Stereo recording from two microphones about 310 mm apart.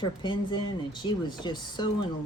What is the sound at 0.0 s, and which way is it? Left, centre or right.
Speech, centre.